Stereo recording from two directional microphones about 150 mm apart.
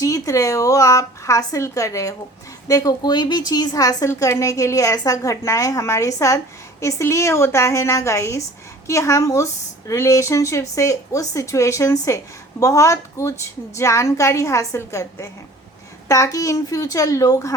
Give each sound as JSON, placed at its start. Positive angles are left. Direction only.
{"t": 0.0, "sound": "a woman's voice", "side_deg": 20}